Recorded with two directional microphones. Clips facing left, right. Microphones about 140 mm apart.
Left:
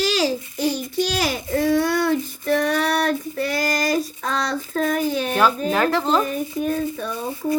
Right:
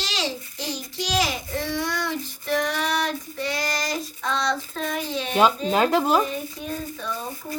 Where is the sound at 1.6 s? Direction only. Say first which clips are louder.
Left 10 dB; 50° left (ahead or behind).